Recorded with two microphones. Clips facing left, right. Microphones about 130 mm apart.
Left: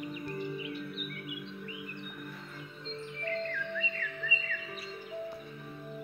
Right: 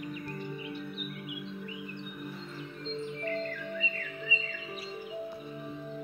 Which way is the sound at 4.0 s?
15° right (ahead or behind).